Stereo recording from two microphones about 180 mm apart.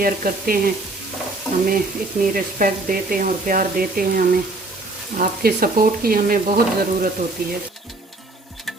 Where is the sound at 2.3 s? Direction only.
50° right (ahead or behind).